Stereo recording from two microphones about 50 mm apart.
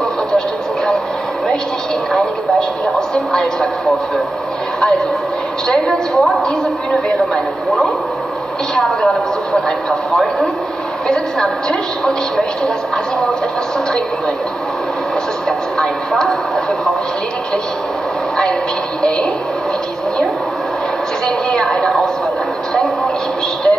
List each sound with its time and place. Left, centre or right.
5.7 s speech: centre
8.7 s speech: centre
11.1 s a woman's voice: centre
15.4 s speech: centre
21.5 s speech: centre